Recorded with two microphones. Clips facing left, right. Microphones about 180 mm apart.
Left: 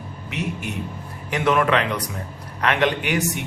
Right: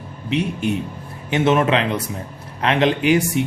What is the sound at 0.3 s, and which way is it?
Speech, 30° right (ahead or behind).